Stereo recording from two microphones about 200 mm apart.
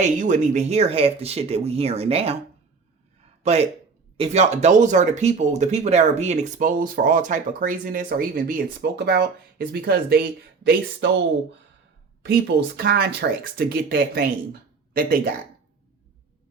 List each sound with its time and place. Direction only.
0.0 s speech: 35° right (ahead or behind)
3.4 s speech: 30° right (ahead or behind); by 11.2 s 55° right (ahead or behind)
12.2 s speech: 55° right (ahead or behind)